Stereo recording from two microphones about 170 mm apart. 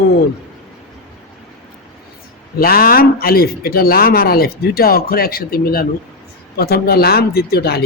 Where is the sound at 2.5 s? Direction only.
60° left (ahead or behind).